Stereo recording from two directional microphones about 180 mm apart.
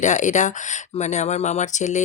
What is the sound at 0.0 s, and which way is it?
Speech, 40° left (ahead or behind).